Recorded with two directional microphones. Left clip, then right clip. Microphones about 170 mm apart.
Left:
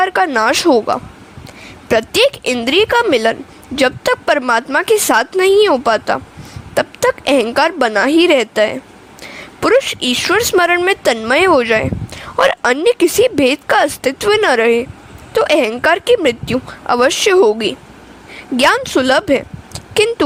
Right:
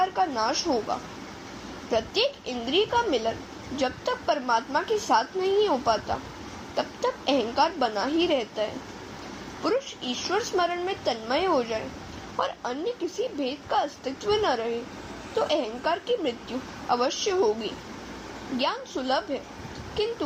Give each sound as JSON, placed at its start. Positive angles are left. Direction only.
{"t": 0.0, "sound": "a woman's voice", "side_deg": 70}
{"t": 9.6, "sound": "a woman's voice", "side_deg": 75}
{"t": 18.5, "sound": "a woman's voice", "side_deg": 70}